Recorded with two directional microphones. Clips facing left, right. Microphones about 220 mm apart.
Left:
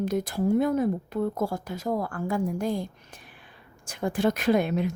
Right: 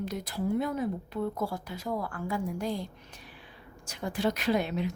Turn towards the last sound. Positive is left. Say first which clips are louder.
# left 5 dB
turn(degrees=50)  # may be behind; listen again after turning